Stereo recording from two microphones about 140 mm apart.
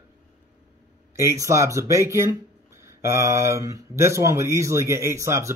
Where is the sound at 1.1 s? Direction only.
20° right (ahead or behind).